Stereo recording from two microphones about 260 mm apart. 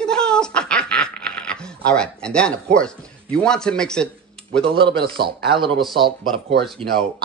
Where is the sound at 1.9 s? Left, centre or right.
Centre.